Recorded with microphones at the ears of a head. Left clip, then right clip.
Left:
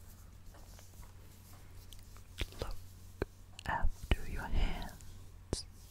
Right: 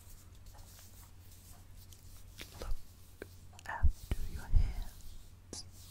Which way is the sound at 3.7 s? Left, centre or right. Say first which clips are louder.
Left 7 dB; left.